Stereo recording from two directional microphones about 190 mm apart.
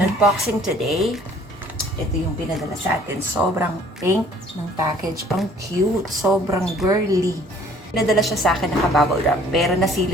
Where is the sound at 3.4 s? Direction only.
5° right (ahead or behind).